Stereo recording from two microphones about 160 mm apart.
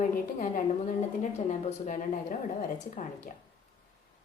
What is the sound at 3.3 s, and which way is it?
Speech, 55° left (ahead or behind).